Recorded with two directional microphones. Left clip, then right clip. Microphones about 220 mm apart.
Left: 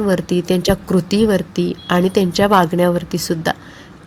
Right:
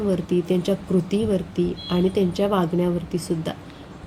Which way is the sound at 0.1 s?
40° left (ahead or behind).